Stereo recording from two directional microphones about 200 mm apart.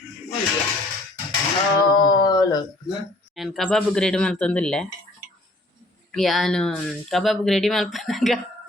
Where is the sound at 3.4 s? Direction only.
Centre (ahead or behind).